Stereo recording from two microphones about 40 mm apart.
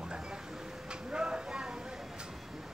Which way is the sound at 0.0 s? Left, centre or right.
Centre.